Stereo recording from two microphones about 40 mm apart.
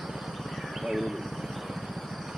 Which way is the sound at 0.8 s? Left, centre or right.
Centre.